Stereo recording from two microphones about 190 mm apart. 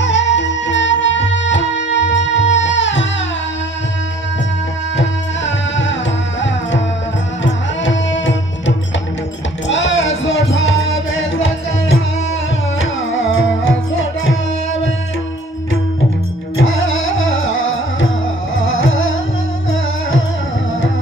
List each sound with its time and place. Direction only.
0.0 s music: 70° left (ahead or behind)
4.9 s music: 75° left (ahead or behind)
7.4 s music: 75° left (ahead or behind)
12.7 s music: 90° left
16.6 s music: 90° left